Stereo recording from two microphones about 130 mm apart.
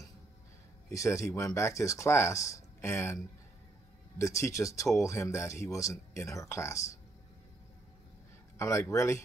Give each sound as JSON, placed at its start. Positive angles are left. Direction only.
{"t": 0.8, "sound": "speech", "side_deg": 25}
{"t": 4.2, "sound": "speech", "side_deg": 25}
{"t": 8.5, "sound": "speech", "side_deg": 20}